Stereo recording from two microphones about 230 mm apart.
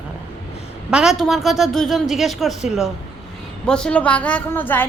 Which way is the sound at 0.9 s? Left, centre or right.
Centre.